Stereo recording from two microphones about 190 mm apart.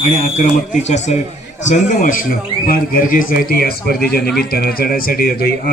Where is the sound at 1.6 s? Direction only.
40° left (ahead or behind).